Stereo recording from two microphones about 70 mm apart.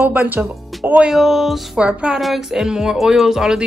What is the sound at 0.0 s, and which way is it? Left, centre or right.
Music, right.